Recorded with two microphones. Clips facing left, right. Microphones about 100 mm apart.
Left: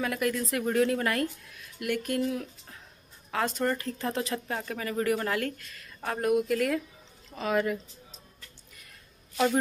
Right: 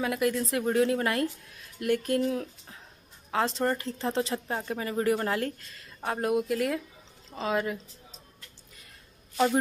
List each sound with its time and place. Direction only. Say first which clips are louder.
0.0 s speech: right 2 dB; 25° right (ahead or behind)
7.2 s a sound: even; 25° right (ahead or behind)
7.5 s speech: left 3 dB; 20° right (ahead or behind)